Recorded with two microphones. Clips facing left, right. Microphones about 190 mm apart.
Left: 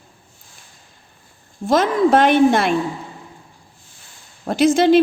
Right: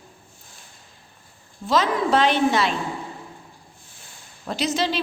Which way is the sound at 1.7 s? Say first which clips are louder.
Left 6 dB; 50° left (ahead or behind).